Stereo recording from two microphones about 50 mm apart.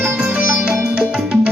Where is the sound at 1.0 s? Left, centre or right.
Centre.